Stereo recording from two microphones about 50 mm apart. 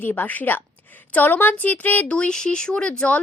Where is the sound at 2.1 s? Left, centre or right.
Centre.